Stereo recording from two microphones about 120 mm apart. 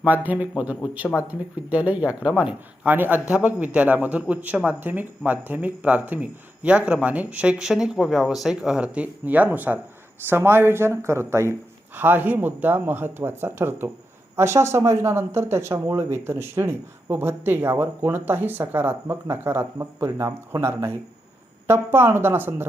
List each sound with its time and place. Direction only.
0.0 s speech: 15° right (ahead or behind)